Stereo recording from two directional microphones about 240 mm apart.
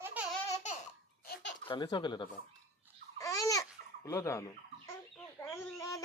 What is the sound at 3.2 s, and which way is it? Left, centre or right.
Babbling, centre.